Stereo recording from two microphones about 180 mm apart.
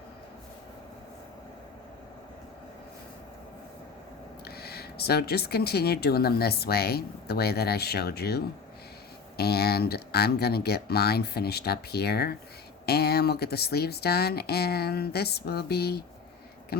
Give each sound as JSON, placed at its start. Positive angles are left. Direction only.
{"t": 4.4, "sound": "speech", "side_deg": 60}